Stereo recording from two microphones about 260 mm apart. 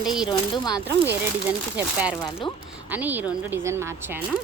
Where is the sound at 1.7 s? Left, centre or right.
Centre.